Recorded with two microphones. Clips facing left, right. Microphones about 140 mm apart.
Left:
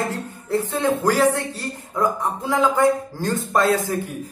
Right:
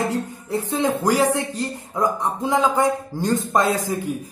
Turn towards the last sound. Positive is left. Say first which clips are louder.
# left 1 dB
turn(degrees=-15)  # may be behind; listen again after turning